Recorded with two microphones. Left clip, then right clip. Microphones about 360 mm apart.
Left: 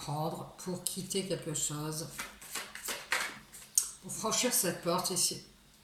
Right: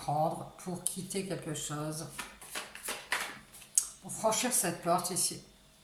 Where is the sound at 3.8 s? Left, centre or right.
Centre.